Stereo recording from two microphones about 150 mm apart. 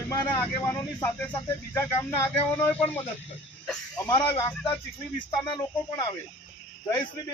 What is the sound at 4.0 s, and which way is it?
Speech, 25° left (ahead or behind).